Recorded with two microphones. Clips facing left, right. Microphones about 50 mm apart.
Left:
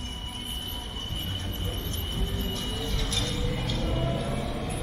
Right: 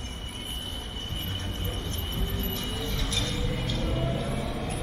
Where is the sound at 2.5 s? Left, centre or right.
Centre.